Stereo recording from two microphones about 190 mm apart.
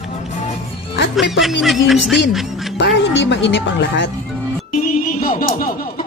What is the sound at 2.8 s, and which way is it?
Speech, 70° left (ahead or behind).